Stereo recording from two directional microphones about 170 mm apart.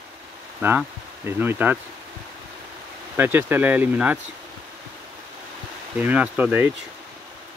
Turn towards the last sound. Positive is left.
turn(degrees=-10)  # may be behind; listen again after turning